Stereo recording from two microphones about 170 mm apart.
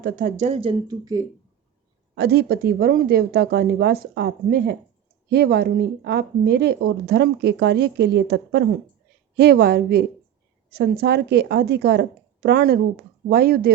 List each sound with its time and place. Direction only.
0.0 s speech: 50° right (ahead or behind); by 1.2 s 25° right (ahead or behind)
2.1 s a woman's voice: 70° right (ahead or behind)
9.3 s a woman's voice: 65° right (ahead or behind)